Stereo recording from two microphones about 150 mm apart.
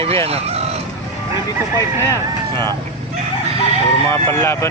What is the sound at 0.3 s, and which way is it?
Speech, 40° right (ahead or behind).